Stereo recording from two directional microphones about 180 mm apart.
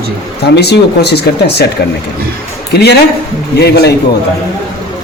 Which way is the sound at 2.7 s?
65° left (ahead or behind).